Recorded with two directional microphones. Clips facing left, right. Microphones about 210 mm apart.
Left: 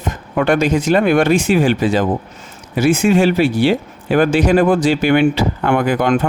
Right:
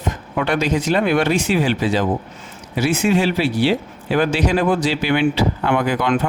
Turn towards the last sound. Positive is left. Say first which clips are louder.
# left 3 dB
turn(degrees=50)  # may be behind; listen again after turning